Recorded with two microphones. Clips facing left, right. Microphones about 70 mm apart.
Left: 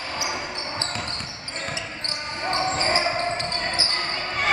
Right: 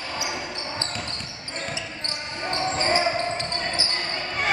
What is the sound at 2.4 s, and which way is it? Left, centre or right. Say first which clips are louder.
Basketball bounce: left 1 dB; centre.